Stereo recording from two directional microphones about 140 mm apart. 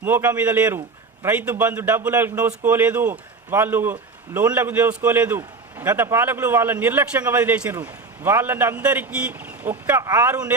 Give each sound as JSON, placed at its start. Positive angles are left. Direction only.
{"t": 0.0, "sound": "a man's voice", "side_deg": -15}